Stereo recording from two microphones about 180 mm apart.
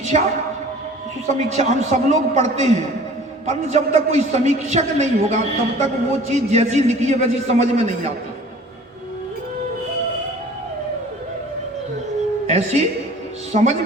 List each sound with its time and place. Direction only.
0.0 s speech: 40° right (ahead or behind)
1.5 s a man's voice: 40° right (ahead or behind)
12.5 s a woman's voice: 40° right (ahead or behind)